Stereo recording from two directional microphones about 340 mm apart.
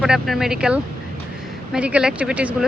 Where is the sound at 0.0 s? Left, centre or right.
Centre.